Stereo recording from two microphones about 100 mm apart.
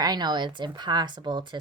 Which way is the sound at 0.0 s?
45° right (ahead or behind).